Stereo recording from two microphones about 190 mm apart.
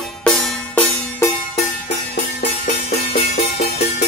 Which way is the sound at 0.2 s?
5° left (ahead or behind).